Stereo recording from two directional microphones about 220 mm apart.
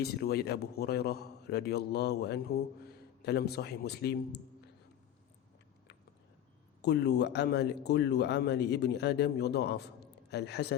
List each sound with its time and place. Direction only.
0.0 s speech: 45° left (ahead or behind)
6.8 s speech: 50° left (ahead or behind)